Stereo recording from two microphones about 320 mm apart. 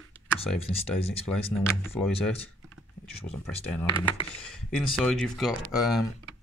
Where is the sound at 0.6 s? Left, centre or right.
Centre.